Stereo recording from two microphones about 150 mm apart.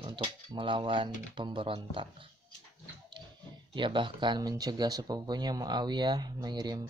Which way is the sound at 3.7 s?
30° right (ahead or behind).